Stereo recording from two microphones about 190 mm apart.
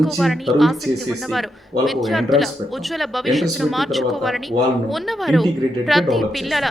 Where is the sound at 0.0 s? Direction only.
Centre (ahead or behind).